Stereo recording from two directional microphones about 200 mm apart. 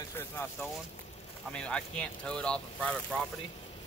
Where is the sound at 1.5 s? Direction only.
5° left (ahead or behind).